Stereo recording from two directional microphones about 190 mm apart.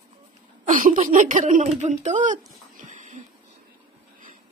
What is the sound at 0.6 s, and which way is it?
Speech, 45° right (ahead or behind).